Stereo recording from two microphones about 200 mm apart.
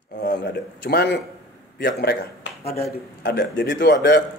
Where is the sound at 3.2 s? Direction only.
55° left (ahead or behind).